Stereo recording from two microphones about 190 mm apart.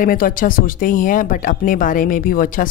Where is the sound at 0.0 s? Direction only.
50° left (ahead or behind).